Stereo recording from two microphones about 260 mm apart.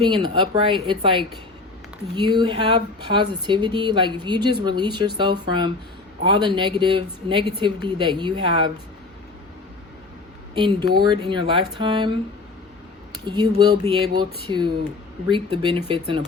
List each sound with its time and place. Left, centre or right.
0.0 s speech: centre
10.5 s speech: centre
13.2 s speech: centre